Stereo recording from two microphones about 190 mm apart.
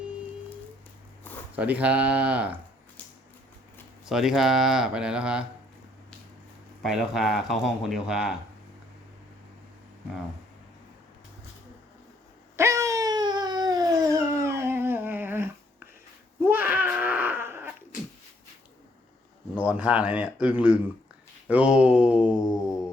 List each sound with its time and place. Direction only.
1.5 s a man's voice: 5° right (ahead or behind)
4.1 s speech: centre (ahead or behind)
6.8 s speech: centre (ahead or behind)
12.5 s a sound: 15° right (ahead or behind)
19.5 s a man's voice: 5° right (ahead or behind)